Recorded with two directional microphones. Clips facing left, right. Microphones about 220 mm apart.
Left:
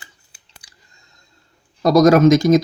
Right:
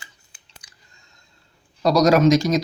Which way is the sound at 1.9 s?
50° left (ahead or behind).